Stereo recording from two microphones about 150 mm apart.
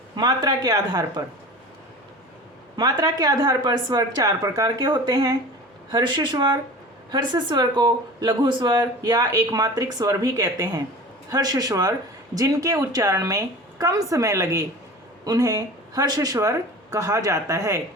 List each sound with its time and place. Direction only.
0.2 s speech: 25° right (ahead or behind)
2.7 s speech: 30° right (ahead or behind)